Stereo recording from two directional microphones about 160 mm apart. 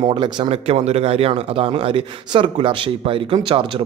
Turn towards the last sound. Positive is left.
turn(degrees=-35)  # may be behind; listen again after turning